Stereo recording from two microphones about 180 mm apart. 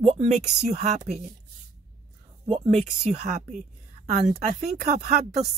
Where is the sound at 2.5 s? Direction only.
35° right (ahead or behind).